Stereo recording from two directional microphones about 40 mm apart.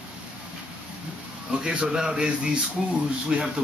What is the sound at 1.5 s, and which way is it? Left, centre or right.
Speech, right.